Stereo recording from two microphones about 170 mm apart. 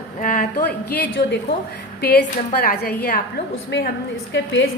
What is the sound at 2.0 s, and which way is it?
A woman's voice, 70° left (ahead or behind).